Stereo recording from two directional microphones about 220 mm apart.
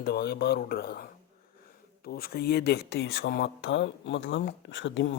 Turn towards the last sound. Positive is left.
turn(degrees=55)  # may be behind; listen again after turning